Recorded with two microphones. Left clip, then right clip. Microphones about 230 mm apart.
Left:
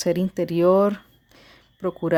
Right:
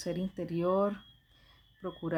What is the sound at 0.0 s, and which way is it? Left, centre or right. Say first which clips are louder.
Speech: left 14 dB; left.